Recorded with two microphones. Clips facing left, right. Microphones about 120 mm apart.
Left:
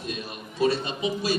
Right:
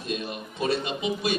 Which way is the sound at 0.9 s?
20° right (ahead or behind).